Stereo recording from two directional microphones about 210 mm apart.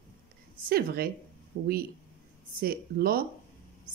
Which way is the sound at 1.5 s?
40° right (ahead or behind).